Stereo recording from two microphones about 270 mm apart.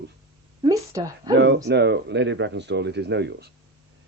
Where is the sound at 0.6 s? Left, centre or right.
Centre.